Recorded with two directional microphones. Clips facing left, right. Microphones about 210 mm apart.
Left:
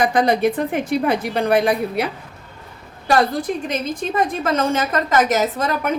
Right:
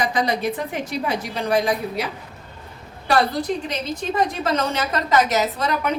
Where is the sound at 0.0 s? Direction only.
55° left (ahead or behind).